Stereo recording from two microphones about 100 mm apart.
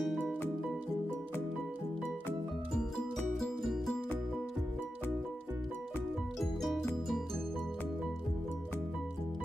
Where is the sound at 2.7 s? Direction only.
5° left (ahead or behind).